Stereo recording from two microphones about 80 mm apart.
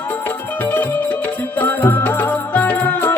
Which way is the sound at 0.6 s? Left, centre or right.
Left.